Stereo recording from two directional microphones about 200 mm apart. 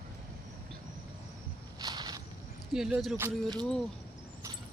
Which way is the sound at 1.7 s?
20° right (ahead or behind).